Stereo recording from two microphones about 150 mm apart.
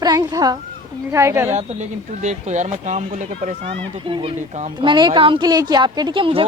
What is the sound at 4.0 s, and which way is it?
Speech, 35° right (ahead or behind).